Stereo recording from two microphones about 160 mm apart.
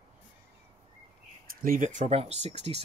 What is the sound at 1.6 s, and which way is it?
Speech, 55° right (ahead or behind).